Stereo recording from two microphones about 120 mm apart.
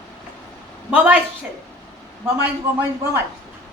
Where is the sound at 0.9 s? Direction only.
15° right (ahead or behind).